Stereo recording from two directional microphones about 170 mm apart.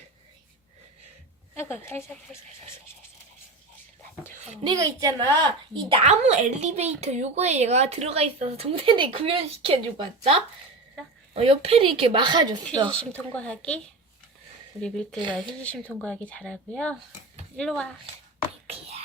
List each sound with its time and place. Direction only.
1.5 s a woman's voice: 15° left (ahead or behind)
4.6 s a woman's voice: 25° right (ahead or behind)
6.1 s speech: 40° right (ahead or behind)
11.0 s speech: 5° left (ahead or behind)
11.3 s speech: 35° right (ahead or behind)
13.0 s a woman's voice: 5° left (ahead or behind)
18.7 s whispering: 40° right (ahead or behind)